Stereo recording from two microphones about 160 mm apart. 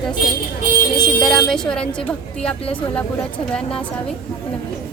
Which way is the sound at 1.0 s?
5° left (ahead or behind).